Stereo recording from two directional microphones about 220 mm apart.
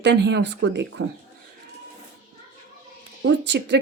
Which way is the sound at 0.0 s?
55° right (ahead or behind).